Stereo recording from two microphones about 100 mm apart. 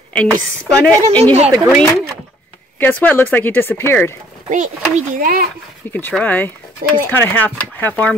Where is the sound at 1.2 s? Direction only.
90° right.